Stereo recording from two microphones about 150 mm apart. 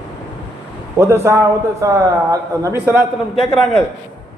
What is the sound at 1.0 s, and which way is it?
A man's voice, 20° right (ahead or behind).